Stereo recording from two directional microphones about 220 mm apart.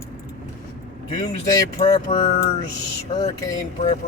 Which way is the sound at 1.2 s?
20° left (ahead or behind).